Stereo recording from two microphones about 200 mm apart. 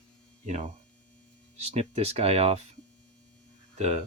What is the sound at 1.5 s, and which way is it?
Speech, 30° right (ahead or behind).